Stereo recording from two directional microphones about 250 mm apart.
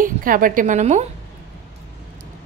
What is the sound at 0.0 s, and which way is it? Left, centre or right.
A woman's voice, right.